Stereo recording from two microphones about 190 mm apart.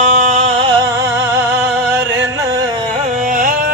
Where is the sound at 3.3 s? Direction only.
50° right (ahead or behind).